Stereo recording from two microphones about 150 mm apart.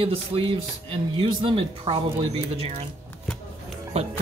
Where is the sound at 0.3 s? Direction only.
40° right (ahead or behind).